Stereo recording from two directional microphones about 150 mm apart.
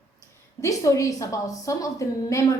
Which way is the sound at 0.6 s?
20° left (ahead or behind).